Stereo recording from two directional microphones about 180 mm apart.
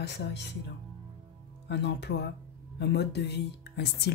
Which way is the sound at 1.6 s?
70° left (ahead or behind).